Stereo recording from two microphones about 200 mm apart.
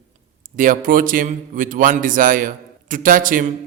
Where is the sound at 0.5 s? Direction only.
40° right (ahead or behind).